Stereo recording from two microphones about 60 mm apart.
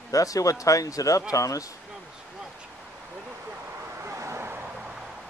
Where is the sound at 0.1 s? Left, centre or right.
Left.